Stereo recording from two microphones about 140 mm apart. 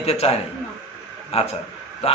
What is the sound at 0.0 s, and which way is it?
A man's voice, 45° left (ahead or behind).